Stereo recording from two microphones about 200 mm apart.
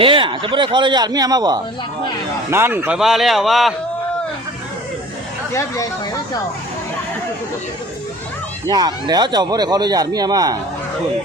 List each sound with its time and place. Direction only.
0.0 s speech: 25° right (ahead or behind); by 3.8 s centre (ahead or behind)
5.5 s speech: 15° left (ahead or behind)
8.7 s speech: 20° right (ahead or behind)